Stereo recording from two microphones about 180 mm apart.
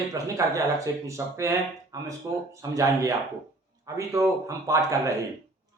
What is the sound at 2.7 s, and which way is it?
Speech, 20° right (ahead or behind).